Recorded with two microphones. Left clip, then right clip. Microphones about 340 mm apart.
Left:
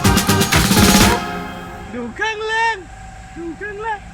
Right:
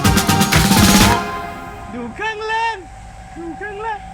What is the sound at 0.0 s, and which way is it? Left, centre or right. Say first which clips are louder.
Music: even; centre.